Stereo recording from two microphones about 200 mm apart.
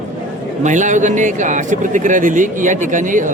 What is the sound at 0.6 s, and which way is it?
A man's voice, 40° right (ahead or behind).